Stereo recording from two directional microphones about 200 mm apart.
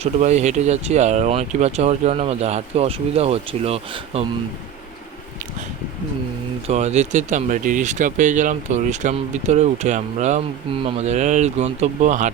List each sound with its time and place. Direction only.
0.0 s speech: 35° right (ahead or behind)
6.7 s speech: 35° right (ahead or behind)